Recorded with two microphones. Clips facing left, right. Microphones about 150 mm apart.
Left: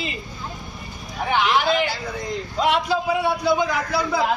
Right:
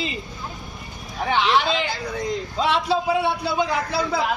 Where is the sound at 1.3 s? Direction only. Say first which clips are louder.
Even; 25° right (ahead or behind).